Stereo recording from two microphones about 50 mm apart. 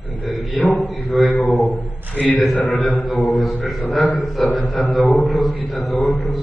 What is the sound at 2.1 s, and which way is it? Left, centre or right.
Speech, left.